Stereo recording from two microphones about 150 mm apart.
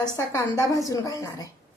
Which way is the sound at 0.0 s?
20° left (ahead or behind).